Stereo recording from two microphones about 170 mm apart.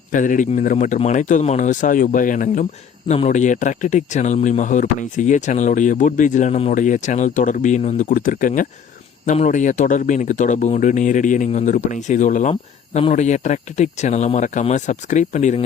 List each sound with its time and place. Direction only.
0.1 s speech: 50° left (ahead or behind)